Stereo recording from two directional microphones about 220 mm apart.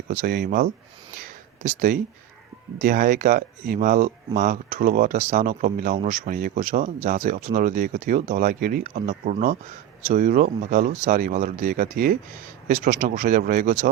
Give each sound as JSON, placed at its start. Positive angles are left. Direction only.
{"t": 0.1, "sound": "speech", "side_deg": -40}
{"t": 1.9, "sound": "speech", "side_deg": -40}